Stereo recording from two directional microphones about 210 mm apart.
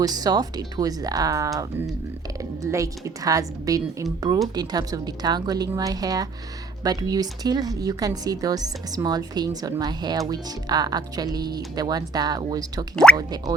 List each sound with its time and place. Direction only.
0.0 s a woman's voice: 20° right (ahead or behind)